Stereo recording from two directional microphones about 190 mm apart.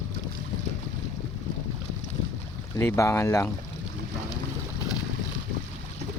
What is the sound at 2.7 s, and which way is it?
Speech, 15° left (ahead or behind).